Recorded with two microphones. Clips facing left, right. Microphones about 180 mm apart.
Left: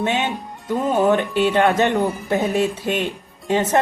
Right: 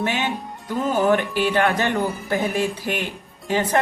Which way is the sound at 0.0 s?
20° left (ahead or behind).